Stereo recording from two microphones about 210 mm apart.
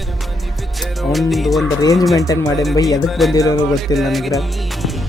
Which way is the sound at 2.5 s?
Centre (ahead or behind).